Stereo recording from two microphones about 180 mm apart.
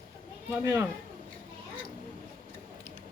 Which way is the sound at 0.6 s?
15° right (ahead or behind).